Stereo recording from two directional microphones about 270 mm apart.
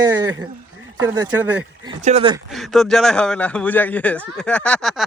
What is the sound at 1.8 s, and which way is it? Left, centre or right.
Speech, right.